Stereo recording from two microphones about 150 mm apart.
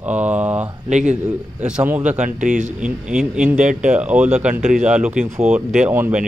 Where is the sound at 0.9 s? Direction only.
55° right (ahead or behind).